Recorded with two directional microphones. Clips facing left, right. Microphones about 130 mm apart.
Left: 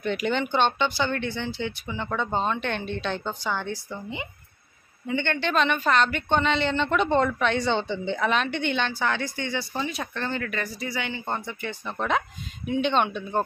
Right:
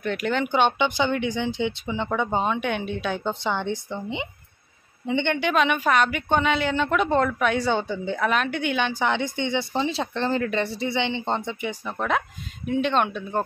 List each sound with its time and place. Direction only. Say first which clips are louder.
0.0 s a woman's voice: right 1 dB; centre (ahead or behind)
3.3 s a woman's voice: right 4 dB; 20° right (ahead or behind)
11.8 s speech: even; centre (ahead or behind)